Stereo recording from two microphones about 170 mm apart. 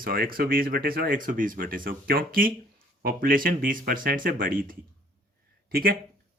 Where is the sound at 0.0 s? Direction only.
60° right (ahead or behind).